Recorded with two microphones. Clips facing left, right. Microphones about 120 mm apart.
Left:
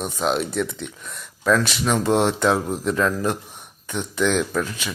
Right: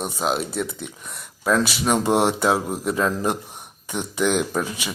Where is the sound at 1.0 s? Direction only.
15° right (ahead or behind).